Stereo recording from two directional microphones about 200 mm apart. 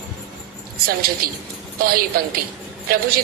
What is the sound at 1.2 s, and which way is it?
A woman's voice, 45° right (ahead or behind).